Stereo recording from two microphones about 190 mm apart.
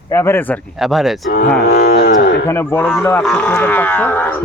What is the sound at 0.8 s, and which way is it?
Speech, centre (ahead or behind).